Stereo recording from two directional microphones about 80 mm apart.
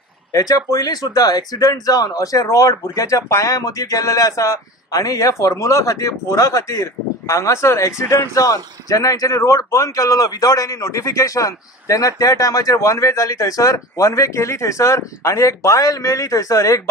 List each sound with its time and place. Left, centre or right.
0.3 s speech: left